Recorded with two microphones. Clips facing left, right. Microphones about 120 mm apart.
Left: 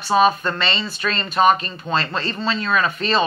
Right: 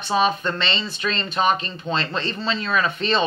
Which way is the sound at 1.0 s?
65° left (ahead or behind).